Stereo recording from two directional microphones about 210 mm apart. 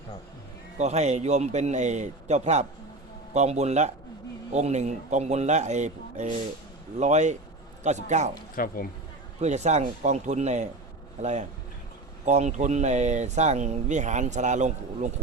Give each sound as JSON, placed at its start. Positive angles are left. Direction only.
{"t": 0.8, "sound": "speech", "side_deg": -30}
{"t": 8.5, "sound": "speech", "side_deg": 45}
{"t": 9.4, "sound": "speech", "side_deg": -30}